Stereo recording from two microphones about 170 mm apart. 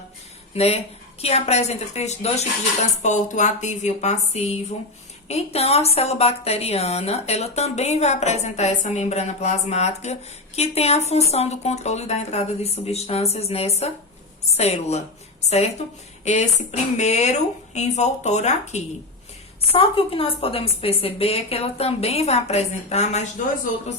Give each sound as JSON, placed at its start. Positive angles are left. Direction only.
{"t": 0.5, "sound": "a woman's voice", "side_deg": 40}